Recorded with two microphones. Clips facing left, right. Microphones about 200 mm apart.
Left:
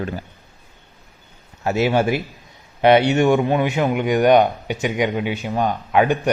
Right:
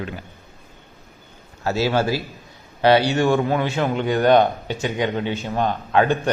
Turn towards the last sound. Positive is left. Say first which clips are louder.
# left 1 dB
turn(degrees=15)  # may be behind; listen again after turning